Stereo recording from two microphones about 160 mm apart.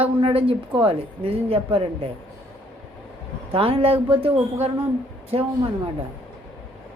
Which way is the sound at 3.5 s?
35° right (ahead or behind).